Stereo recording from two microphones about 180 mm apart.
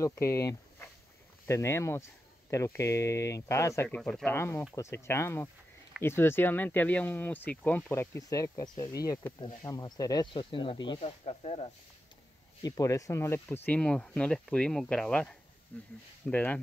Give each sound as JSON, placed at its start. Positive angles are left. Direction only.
{"t": 0.0, "sound": "speech", "side_deg": 15}
{"t": 12.6, "sound": "speech", "side_deg": 20}